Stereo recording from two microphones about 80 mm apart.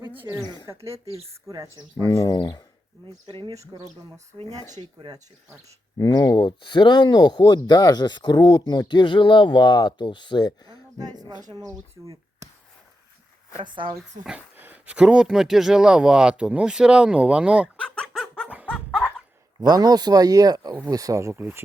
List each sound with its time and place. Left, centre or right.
0.3 s speech: right
0.6 s speech: right
2.0 s speech: left
3.2 s speech: right
3.7 s speech: right
4.9 s speech: right
6.2 s speech: left
10.9 s speech: right
14.5 s speech: right
18.1 s music: centre
18.4 s music: centre
18.7 s a sound: centre
19.5 s speech: right
21.3 s speech: right